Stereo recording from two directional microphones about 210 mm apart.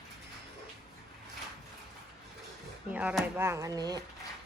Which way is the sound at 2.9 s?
5° right (ahead or behind).